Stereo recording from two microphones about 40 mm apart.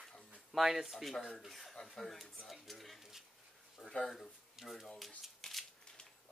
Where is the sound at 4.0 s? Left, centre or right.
Centre.